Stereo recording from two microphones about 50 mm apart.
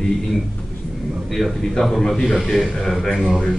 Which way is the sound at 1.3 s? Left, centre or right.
Centre.